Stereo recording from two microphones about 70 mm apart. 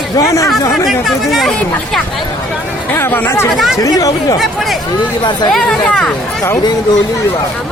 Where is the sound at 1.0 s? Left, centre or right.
Centre.